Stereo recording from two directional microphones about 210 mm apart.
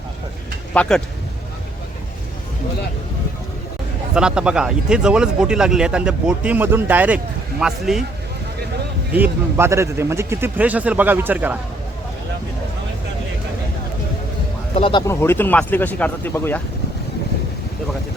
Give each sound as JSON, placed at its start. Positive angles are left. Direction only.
{"t": 0.7, "sound": "speech", "side_deg": 5}
{"t": 4.1, "sound": "speech", "side_deg": -5}
{"t": 9.1, "sound": "speech", "side_deg": -10}
{"t": 14.8, "sound": "speech", "side_deg": 25}
{"t": 15.0, "sound": "speech", "side_deg": 10}